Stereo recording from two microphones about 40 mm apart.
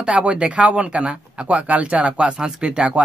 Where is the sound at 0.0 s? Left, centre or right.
Right.